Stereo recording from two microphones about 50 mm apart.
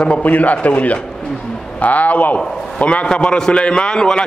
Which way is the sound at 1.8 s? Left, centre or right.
Left.